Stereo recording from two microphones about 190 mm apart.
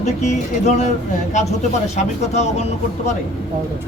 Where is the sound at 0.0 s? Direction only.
35° left (ahead or behind).